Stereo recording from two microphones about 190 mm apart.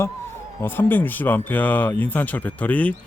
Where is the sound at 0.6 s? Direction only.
10° left (ahead or behind).